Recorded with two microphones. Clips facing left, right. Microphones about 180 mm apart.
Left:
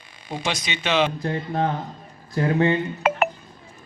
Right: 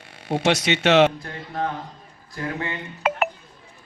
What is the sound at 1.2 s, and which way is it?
Speech, 25° left (ahead or behind).